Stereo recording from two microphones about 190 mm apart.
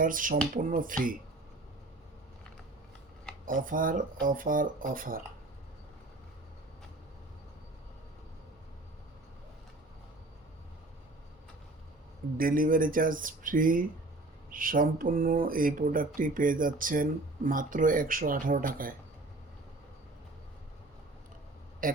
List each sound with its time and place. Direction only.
0.0 s speech: 45° right (ahead or behind)
3.4 s speech: 45° right (ahead or behind)
12.4 s speech: 50° right (ahead or behind)
21.8 s a man's voice: 45° right (ahead or behind)